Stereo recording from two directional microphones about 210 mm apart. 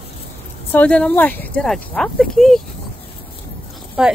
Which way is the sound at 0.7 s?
5° left (ahead or behind).